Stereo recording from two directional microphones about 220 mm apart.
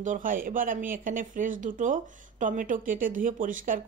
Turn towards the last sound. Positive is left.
turn(degrees=-40)  # may be behind; listen again after turning